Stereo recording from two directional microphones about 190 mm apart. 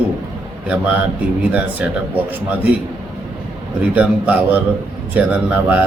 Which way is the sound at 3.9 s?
5° right (ahead or behind).